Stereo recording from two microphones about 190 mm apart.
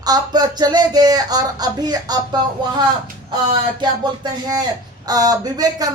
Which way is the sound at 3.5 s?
25° right (ahead or behind).